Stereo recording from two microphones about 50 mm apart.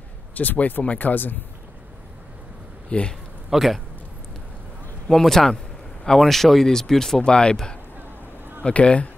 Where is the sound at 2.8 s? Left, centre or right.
Left.